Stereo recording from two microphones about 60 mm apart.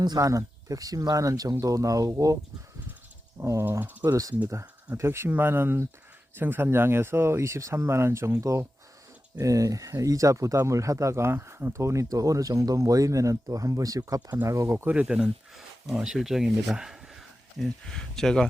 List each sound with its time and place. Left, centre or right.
0.2 s speech: right
3.3 s speech: right
3.7 s speech: right
4.0 s speech: right
4.9 s speech: right
14.4 s speech: right
15.5 s speech: centre
17.8 s speech: centre